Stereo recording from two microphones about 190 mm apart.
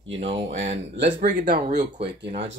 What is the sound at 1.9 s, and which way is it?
Speech, 65° right (ahead or behind).